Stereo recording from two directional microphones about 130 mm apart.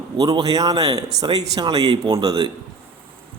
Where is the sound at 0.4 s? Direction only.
30° right (ahead or behind).